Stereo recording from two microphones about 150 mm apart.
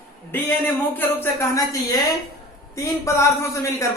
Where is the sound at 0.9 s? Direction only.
15° left (ahead or behind).